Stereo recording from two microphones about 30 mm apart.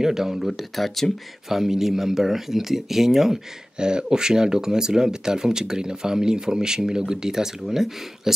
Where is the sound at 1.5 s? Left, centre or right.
Centre.